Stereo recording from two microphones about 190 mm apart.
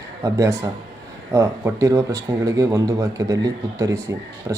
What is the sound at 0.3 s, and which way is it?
A man's voice, 15° right (ahead or behind).